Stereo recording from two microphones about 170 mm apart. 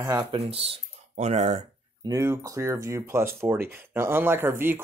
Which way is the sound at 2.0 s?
20° right (ahead or behind).